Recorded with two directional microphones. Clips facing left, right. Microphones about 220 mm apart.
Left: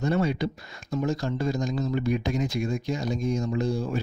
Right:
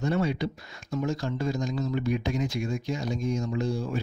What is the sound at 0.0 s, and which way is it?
Speech, 40° left (ahead or behind).